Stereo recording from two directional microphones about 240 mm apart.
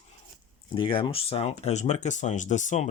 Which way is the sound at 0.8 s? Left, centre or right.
Left.